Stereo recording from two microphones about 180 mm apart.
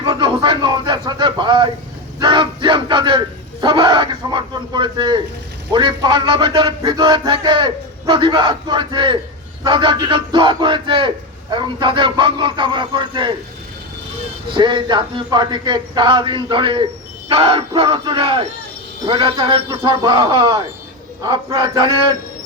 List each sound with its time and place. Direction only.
0.0 s a sound: 25° right (ahead or behind)
2.1 s speech: 25° right (ahead or behind)
14.5 s speech: 25° right (ahead or behind)